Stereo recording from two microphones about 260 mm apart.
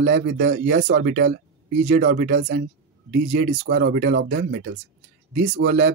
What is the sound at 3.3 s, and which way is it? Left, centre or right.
Speech, right.